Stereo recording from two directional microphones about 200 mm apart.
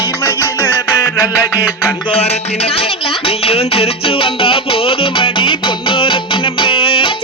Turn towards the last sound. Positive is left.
turn(degrees=25)  # may be behind; listen again after turning